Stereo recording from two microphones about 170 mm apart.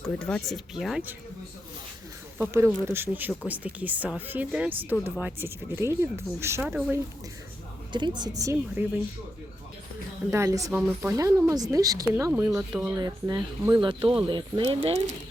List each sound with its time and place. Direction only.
0.0 s speech: 5° left (ahead or behind)
2.4 s speech: 15° right (ahead or behind)
6.6 s speech: 5° right (ahead or behind)
7.9 s speech: 25° right (ahead or behind)
10.3 s speech: 20° right (ahead or behind)
12.3 s speech: 5° right (ahead or behind); by 15.0 s 35° right (ahead or behind)